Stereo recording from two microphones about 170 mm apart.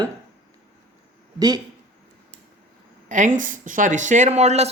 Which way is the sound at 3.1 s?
50° right (ahead or behind).